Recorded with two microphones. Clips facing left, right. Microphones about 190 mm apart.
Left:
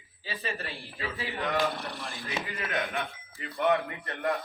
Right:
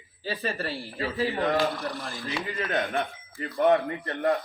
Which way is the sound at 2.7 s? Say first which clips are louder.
Right 5 dB; 35° right (ahead or behind).